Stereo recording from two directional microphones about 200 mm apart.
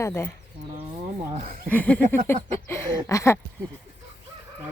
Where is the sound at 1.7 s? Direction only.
5° left (ahead or behind).